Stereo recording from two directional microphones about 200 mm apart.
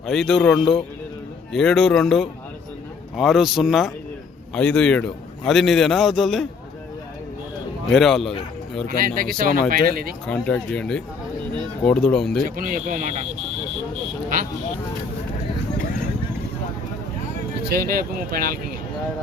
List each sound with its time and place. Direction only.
0.0 s a man's voice: centre (ahead or behind)
7.9 s a man's voice: centre (ahead or behind)
9.0 s speech: 45° right (ahead or behind)
10.2 s a man's voice: 5° left (ahead or behind)
12.5 s speech: 45° right (ahead or behind)
17.7 s speech: 50° right (ahead or behind)